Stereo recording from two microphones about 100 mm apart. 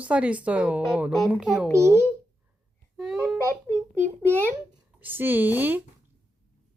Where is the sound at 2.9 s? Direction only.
Centre (ahead or behind).